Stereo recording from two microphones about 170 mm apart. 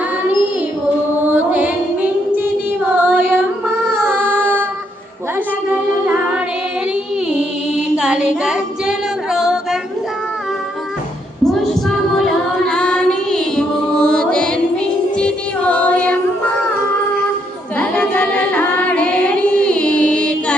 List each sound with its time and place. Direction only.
1.3 s music: 10° right (ahead or behind)
7.9 s female singing: 5° right (ahead or behind)
11.4 s female singing: centre (ahead or behind)
15.2 s child singing: 5° left (ahead or behind)
17.7 s carnatic music: 10° left (ahead or behind)